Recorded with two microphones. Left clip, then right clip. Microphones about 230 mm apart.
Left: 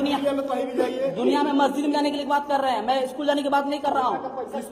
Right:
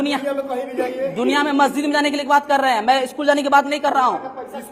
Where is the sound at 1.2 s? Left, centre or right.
Right.